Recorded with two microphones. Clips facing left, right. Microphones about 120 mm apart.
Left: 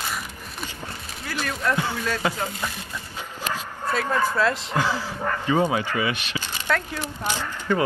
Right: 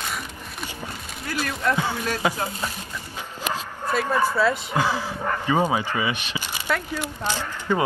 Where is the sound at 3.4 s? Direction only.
15° right (ahead or behind).